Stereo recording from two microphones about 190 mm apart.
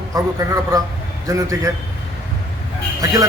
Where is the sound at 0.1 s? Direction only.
15° right (ahead or behind).